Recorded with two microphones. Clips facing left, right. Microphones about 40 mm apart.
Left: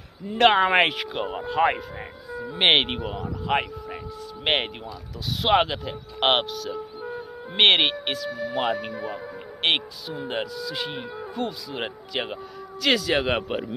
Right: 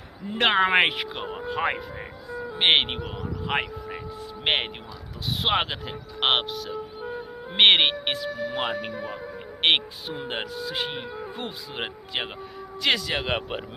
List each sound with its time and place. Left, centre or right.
0.4 s speech: centre
1.1 s speech: centre
3.4 s speech: centre
6.7 s music: centre
8.3 s speech: centre
9.6 s speech: right
10.0 s speech: right
12.8 s speech: centre